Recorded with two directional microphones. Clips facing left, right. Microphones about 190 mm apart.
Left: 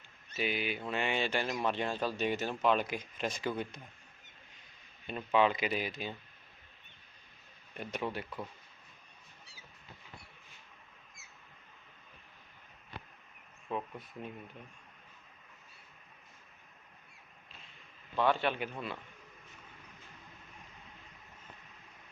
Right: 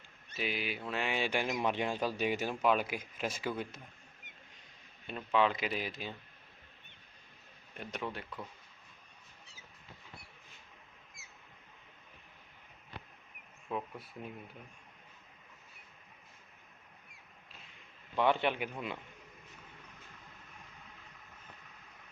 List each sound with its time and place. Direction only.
0.3 s speech: centre (ahead or behind)
5.0 s speech: centre (ahead or behind)
7.8 s speech: centre (ahead or behind)
14.0 s speech: 5° right (ahead or behind)
18.2 s speech: 20° right (ahead or behind)